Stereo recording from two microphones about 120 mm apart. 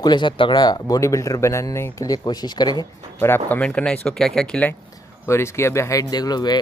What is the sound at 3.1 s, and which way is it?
A man's voice, 20° left (ahead or behind).